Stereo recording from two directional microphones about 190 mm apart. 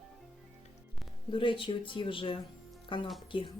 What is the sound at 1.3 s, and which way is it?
A woman's voice, 25° left (ahead or behind).